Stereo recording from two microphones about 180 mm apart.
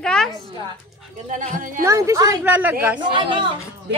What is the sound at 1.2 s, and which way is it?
Speech, 45° right (ahead or behind).